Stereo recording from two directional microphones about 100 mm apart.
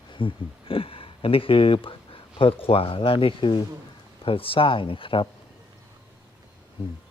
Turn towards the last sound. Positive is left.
turn(degrees=60)  # may be behind; listen again after turning